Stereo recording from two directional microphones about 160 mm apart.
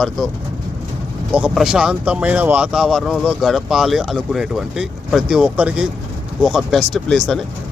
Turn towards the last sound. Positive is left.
turn(degrees=0)  # may be behind; listen again after turning